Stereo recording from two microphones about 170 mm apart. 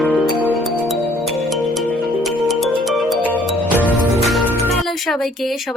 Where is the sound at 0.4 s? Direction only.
Centre (ahead or behind).